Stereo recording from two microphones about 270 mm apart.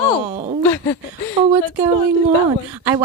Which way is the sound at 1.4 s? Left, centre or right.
Centre.